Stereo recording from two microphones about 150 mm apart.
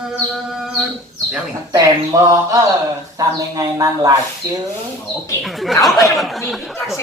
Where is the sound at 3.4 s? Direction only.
20° right (ahead or behind).